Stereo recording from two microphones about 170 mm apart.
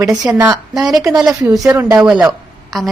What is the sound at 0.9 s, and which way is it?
Speech, 20° right (ahead or behind).